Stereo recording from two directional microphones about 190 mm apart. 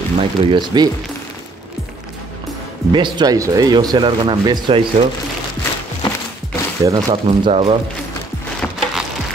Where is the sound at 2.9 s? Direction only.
25° right (ahead or behind).